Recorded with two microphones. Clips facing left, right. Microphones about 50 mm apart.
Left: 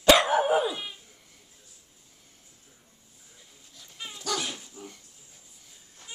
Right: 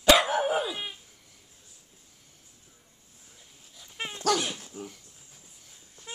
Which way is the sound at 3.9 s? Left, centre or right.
Right.